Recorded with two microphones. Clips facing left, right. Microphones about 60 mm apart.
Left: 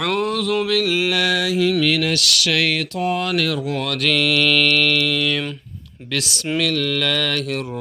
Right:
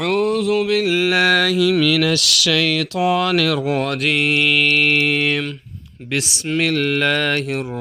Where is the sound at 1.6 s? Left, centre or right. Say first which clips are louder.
Right 2 dB; right.